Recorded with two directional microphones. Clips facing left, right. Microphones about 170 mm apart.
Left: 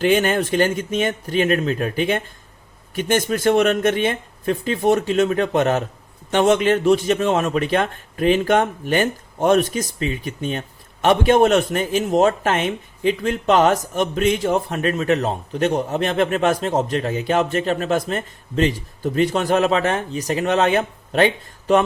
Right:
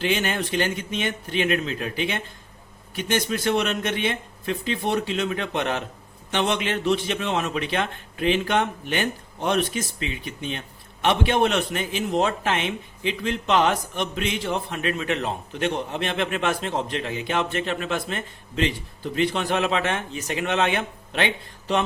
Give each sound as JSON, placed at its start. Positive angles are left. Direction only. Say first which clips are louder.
{"t": 0.0, "sound": "a man's voice", "louder": "left 7 dB", "side_deg": 50}